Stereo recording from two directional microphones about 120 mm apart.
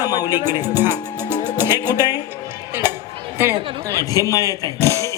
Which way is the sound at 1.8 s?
35° left (ahead or behind).